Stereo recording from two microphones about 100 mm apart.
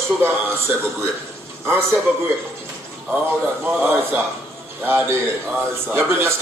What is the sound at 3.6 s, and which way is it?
A man's voice, 20° right (ahead or behind).